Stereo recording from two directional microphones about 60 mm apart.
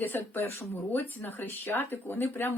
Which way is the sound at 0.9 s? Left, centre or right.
Left.